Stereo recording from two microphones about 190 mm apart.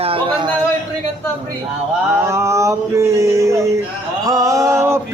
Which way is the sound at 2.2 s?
15° right (ahead or behind).